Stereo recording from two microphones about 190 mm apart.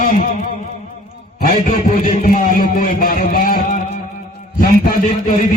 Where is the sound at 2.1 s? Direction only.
45° left (ahead or behind).